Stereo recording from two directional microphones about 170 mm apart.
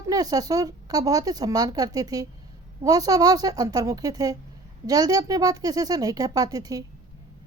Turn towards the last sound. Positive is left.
turn(degrees=-20)  # may be behind; listen again after turning